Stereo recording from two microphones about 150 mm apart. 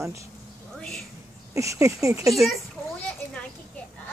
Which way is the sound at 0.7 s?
5° left (ahead or behind).